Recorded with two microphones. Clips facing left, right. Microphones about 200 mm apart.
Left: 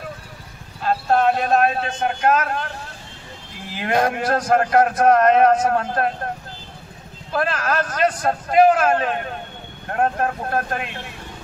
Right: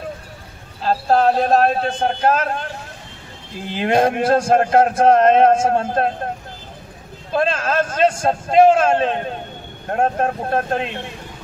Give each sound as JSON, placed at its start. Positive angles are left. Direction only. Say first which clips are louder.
{"t": 0.8, "sound": "a man's voice", "louder": "right 2 dB", "side_deg": -30}
{"t": 7.3, "sound": "a man's voice", "louder": "right 3 dB", "side_deg": -25}